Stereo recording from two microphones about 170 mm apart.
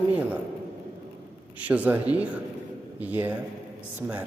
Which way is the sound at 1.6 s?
10° right (ahead or behind).